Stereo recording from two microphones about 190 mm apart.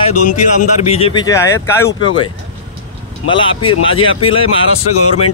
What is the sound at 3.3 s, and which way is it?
Speech, 25° left (ahead or behind).